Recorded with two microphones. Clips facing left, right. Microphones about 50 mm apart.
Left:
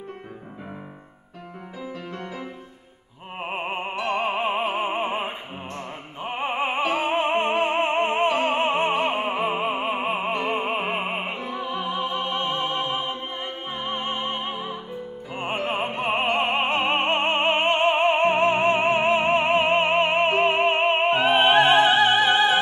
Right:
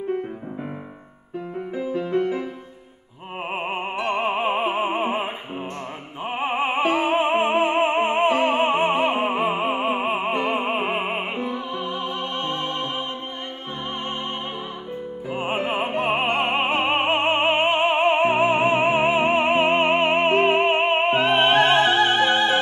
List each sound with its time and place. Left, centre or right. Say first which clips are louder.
1.8 s music: right 11 dB; right
3.4 s opera: right 1 dB; centre
4.1 s music: right 2 dB; centre
11.8 s music: left 1 dB; centre
15.3 s music: right 2 dB; centre